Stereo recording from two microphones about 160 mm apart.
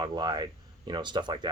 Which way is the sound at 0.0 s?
30° right (ahead or behind).